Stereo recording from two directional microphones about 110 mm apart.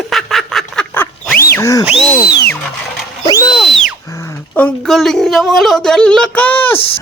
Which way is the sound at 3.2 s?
40° left (ahead or behind).